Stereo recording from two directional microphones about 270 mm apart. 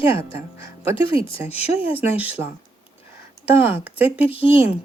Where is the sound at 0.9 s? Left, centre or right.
Centre.